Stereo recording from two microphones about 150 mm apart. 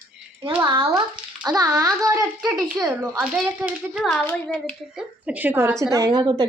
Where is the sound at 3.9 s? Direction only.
5° left (ahead or behind).